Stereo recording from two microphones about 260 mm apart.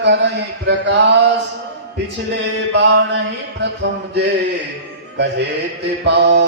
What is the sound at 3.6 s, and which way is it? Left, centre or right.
Speech, right.